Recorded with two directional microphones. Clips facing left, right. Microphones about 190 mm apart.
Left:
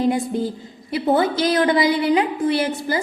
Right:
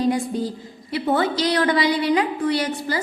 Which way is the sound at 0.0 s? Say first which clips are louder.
Left 1 dB; 25° left (ahead or behind).